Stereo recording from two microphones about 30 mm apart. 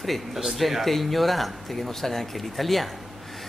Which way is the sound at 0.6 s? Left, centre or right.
Centre.